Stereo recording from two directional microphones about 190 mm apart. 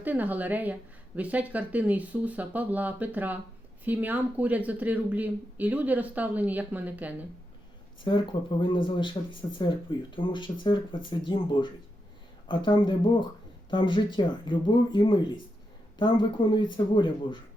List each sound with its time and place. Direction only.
0.0 s speech: 10° right (ahead or behind)
8.0 s speech: 25° left (ahead or behind)